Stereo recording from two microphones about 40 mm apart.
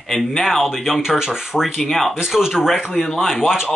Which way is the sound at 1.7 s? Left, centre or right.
Centre.